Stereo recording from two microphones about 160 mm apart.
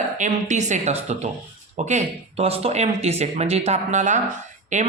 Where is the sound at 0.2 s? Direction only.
50° right (ahead or behind).